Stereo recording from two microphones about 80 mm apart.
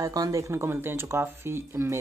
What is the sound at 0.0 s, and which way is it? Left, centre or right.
Speech, right.